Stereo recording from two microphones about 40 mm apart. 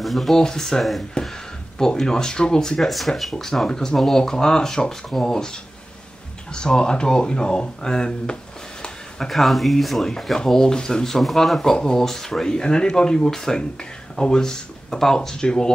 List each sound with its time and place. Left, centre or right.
0.0 s speech: centre
0.4 s speech: centre
1.2 s a sound: left
1.8 s speech: centre
2.8 s speech: centre
9.3 s speech: centre